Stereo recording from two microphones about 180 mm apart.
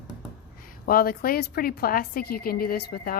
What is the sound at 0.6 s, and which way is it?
A woman's voice, 55° left (ahead or behind).